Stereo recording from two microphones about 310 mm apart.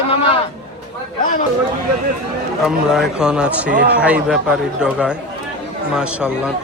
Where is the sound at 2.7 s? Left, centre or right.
Centre.